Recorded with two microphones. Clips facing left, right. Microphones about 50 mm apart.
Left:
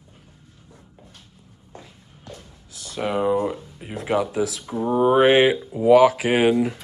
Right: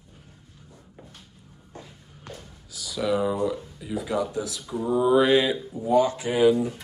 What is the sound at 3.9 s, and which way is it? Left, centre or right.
Speech, left.